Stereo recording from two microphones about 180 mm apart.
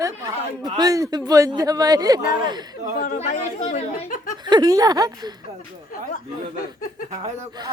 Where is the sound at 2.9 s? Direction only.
45° left (ahead or behind).